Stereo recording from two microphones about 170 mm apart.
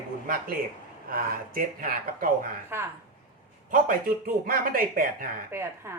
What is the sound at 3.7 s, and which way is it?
Speech, 55° right (ahead or behind).